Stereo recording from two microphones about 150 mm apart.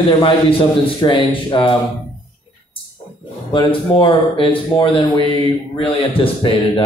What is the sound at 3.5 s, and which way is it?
A man's voice, 35° left (ahead or behind).